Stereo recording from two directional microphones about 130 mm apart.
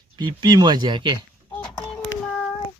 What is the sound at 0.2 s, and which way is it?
Speech, 35° right (ahead or behind).